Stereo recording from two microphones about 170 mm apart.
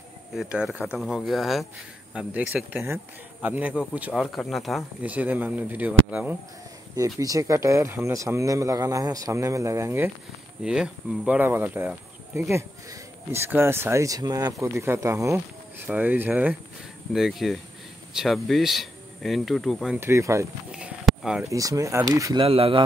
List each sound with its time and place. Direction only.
0.3 s insect: 5° right (ahead or behind)
2.1 s speech: 10° right (ahead or behind)
7.2 s speech: 20° right (ahead or behind)
17.1 s insect: centre (ahead or behind)
20.0 s speech: 15° right (ahead or behind)
20.7 s a sound: 5° right (ahead or behind)
21.5 s speech: 20° right (ahead or behind)
22.4 s speech: 35° right (ahead or behind)